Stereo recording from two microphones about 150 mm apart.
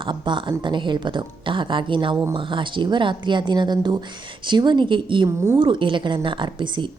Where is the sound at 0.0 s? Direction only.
30° right (ahead or behind).